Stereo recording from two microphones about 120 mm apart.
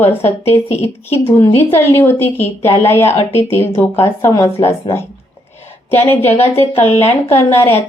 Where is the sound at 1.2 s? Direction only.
20° left (ahead or behind).